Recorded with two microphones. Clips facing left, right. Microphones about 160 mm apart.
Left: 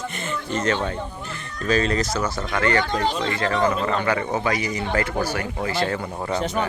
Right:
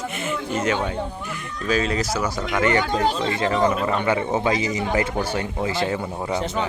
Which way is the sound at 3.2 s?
25° right (ahead or behind).